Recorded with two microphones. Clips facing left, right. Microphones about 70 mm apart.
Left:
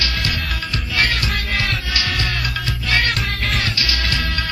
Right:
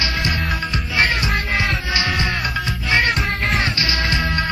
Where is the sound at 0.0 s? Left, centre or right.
Right.